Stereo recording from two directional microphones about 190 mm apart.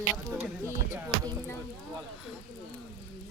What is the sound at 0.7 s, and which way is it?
Music, 15° right (ahead or behind).